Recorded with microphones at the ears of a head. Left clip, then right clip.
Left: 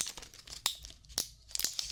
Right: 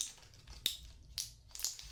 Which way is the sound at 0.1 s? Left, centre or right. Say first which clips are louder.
Left 10 dB; left.